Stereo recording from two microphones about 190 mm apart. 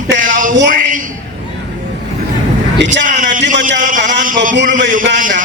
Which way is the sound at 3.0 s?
45° right (ahead or behind).